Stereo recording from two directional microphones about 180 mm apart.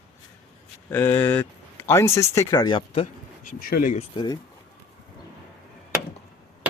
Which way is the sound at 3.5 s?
50° left (ahead or behind).